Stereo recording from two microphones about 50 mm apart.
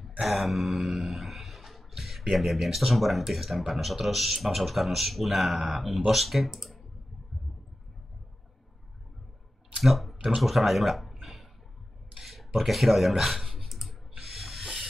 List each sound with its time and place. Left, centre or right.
0.2 s a sound: centre
2.3 s speech: centre
9.8 s speech: centre
12.2 s computer keyboard: centre